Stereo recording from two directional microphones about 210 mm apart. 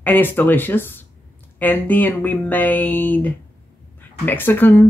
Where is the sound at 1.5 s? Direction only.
10° left (ahead or behind).